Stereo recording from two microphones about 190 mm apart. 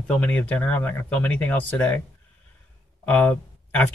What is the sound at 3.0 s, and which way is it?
Speech, 10° left (ahead or behind).